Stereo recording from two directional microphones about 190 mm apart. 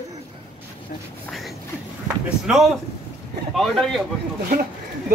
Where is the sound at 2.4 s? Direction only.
Centre (ahead or behind).